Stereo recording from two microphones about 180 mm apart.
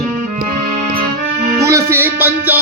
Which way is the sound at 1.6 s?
15° right (ahead or behind).